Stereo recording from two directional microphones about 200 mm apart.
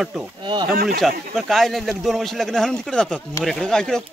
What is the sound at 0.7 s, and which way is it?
Speech, 45° right (ahead or behind).